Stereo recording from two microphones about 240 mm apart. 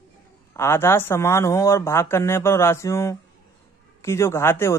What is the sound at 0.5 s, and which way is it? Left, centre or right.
Speech, centre.